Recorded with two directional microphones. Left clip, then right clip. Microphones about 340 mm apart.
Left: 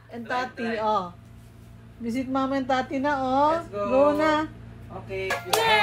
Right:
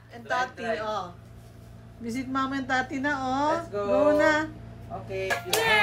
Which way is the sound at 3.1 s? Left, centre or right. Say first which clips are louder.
Left 4 dB; left.